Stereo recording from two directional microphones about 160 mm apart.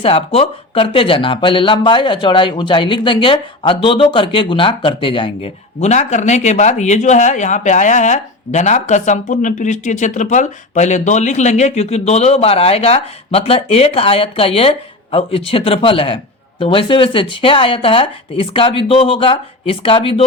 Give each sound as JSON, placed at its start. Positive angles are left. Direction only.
{"t": 0.0, "sound": "speech", "side_deg": 35}
{"t": 5.8, "sound": "speech", "side_deg": 45}